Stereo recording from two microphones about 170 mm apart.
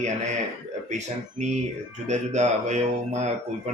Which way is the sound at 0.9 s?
45° right (ahead or behind).